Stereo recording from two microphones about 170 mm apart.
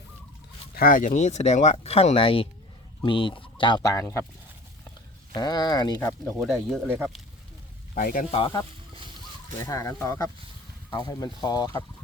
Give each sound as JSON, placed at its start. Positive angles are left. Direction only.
{"t": 0.8, "sound": "speech", "side_deg": 55}
{"t": 5.3, "sound": "speech", "side_deg": 25}
{"t": 6.4, "sound": "speech", "side_deg": 0}
{"t": 7.9, "sound": "speech", "side_deg": 55}
{"t": 8.3, "sound": "speech", "side_deg": 30}
{"t": 9.6, "sound": "speech", "side_deg": 15}